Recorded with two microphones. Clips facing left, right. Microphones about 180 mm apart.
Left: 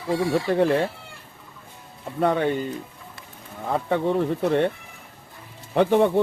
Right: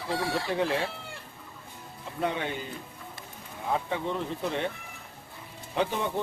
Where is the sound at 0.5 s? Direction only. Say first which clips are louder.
Left 8 dB; 50° left (ahead or behind).